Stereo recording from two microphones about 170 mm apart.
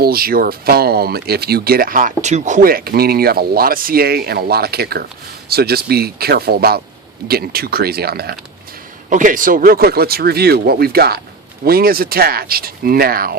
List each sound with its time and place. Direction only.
0.0 s speech: 60° right (ahead or behind)
9.0 s speech: 50° right (ahead or behind)